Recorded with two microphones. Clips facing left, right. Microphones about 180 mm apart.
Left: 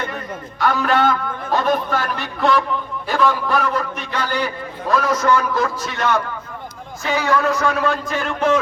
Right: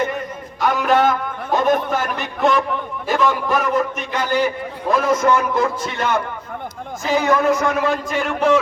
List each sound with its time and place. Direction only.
0.6 s a sound: 15° right (ahead or behind)
1.6 s a man's voice: 20° right (ahead or behind)
7.2 s speech: 20° right (ahead or behind)